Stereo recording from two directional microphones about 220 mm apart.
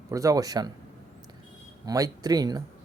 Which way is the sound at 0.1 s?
15° right (ahead or behind).